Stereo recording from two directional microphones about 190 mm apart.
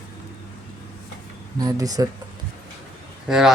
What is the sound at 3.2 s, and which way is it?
Speech, 5° right (ahead or behind).